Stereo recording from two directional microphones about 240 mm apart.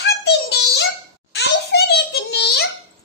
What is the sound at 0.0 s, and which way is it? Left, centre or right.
Child singing, left.